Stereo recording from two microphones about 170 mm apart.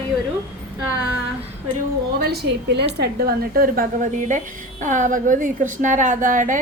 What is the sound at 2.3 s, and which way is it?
Speech, 80° right.